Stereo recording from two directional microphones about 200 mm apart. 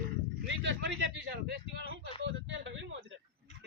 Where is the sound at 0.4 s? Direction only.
65° right (ahead or behind).